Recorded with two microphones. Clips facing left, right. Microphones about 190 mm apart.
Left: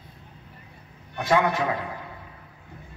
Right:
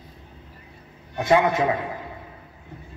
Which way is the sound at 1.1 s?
20° right (ahead or behind).